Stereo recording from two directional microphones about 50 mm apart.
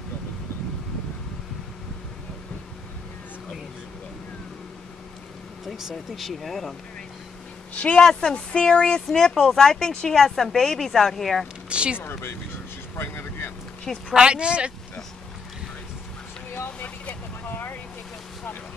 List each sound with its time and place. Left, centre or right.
6.1 s speech: centre
7.7 s speech: left
8.0 s speech: centre
11.7 s speech: right
12.0 s speech: left
12.9 s vehicle: left
14.1 s speech: centre
16.5 s vehicle: left